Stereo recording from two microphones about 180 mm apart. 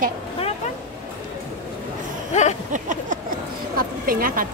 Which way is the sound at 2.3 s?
40° left (ahead or behind).